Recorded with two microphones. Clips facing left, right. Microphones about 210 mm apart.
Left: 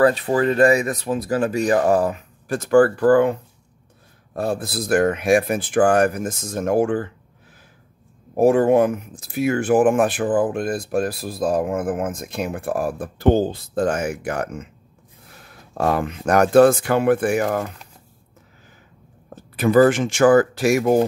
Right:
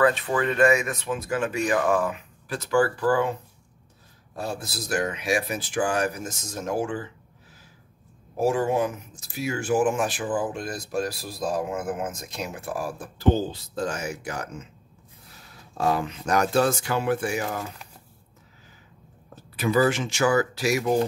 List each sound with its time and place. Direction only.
0.0 s speech: 35° left (ahead or behind); by 3.3 s 55° left (ahead or behind)
4.4 s speech: 55° left (ahead or behind)
8.4 s speech: 55° left (ahead or behind)
19.3 s speech: 50° left (ahead or behind)